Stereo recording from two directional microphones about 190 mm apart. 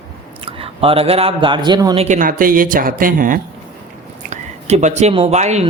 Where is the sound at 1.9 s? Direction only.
40° right (ahead or behind).